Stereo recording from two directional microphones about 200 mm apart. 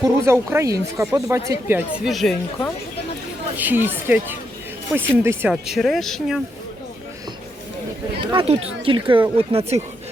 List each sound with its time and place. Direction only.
0.0 s speech: 15° right (ahead or behind)
2.0 s speech: centre (ahead or behind)
3.6 s speech: 10° right (ahead or behind)
8.2 s speech: 25° right (ahead or behind)